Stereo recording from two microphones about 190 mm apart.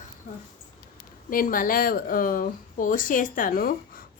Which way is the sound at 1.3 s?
45° left (ahead or behind).